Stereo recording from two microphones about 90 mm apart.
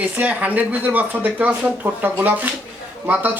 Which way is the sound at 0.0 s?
15° right (ahead or behind).